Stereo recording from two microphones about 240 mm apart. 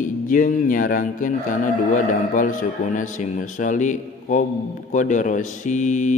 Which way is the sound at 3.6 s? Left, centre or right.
Left.